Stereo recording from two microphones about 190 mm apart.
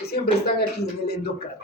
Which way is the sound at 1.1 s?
55° left (ahead or behind).